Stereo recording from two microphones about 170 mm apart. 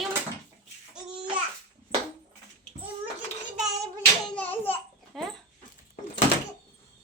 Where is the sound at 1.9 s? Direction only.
35° right (ahead or behind).